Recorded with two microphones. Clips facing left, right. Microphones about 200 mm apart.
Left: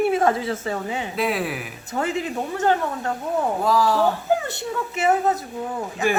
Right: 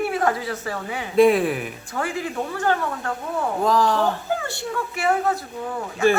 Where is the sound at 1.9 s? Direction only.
20° left (ahead or behind).